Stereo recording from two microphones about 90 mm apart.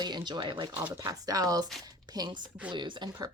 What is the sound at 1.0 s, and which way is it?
A woman's voice, 40° right (ahead or behind).